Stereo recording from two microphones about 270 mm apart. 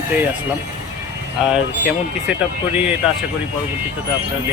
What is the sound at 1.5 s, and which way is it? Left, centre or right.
Speech, centre.